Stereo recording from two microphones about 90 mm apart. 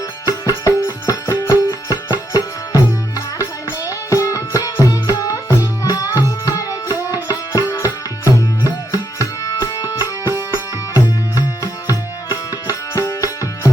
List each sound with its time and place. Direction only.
0.3 s music: 35° left (ahead or behind)